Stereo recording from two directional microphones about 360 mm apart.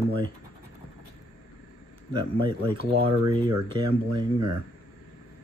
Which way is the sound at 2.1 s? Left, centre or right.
Centre.